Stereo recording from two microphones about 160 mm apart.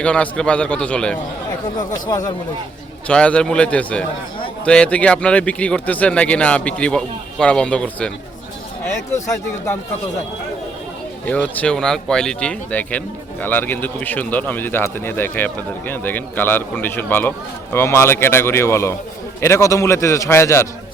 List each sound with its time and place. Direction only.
0.0 s speech: 5° left (ahead or behind)
1.8 s speech: 25° left (ahead or behind)
3.1 s speech: 5° left (ahead or behind)
9.1 s speech: 20° left (ahead or behind)
11.3 s speech: 10° left (ahead or behind)